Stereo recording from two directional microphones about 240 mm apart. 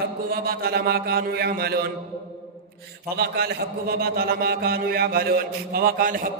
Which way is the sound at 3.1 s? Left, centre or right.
Right.